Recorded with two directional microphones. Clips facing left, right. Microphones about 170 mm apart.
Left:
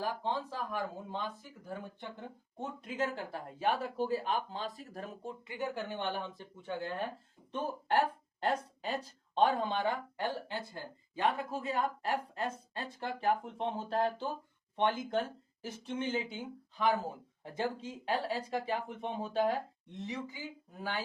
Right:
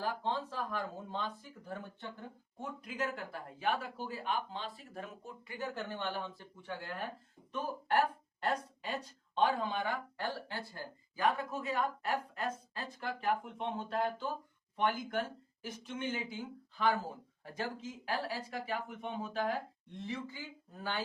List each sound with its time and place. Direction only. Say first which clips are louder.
0.0 s speech: left 1 dB; 15° left (ahead or behind)
2.6 s speech: left 3 dB; 25° left (ahead or behind)
5.5 s speech: left 2 dB; 15° left (ahead or behind)
10.2 s speech: left 3 dB; 20° left (ahead or behind)